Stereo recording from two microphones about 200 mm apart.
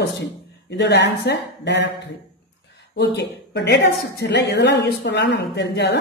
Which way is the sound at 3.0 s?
60° left (ahead or behind).